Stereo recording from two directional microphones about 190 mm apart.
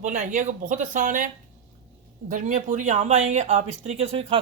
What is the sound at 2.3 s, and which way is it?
Speech, 40° right (ahead or behind).